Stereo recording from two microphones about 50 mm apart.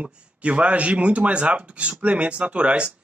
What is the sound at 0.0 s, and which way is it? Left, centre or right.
A man's voice, right.